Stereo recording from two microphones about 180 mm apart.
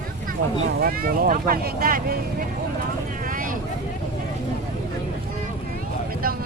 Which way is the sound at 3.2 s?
50° right (ahead or behind).